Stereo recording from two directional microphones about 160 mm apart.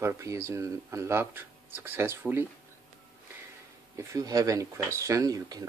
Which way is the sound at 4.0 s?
20° right (ahead or behind).